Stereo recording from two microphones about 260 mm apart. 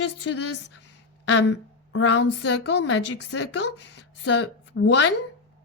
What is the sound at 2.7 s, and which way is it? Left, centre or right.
A woman's voice, left.